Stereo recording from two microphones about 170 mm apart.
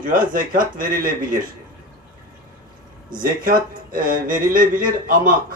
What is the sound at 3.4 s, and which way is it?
Speech, 55° right (ahead or behind).